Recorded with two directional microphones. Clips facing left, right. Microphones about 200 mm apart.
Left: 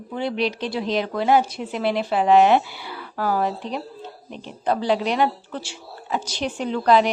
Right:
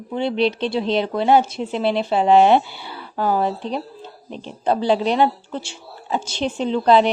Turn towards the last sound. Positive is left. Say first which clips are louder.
# right 3 dB
turn(degrees=-25)  # may be behind; listen again after turning